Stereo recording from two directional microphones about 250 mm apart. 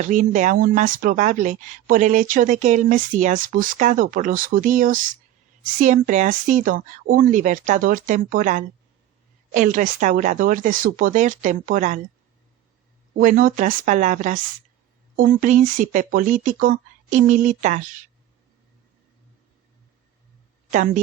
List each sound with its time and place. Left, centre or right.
0.0 s speech: right
13.1 s speech: right
20.7 s a woman's voice: right